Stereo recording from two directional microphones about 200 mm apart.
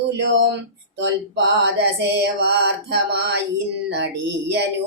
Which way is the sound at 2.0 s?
55° right (ahead or behind).